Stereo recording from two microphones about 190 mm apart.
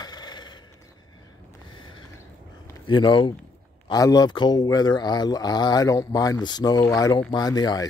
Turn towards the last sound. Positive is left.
turn(degrees=20)  # may be behind; listen again after turning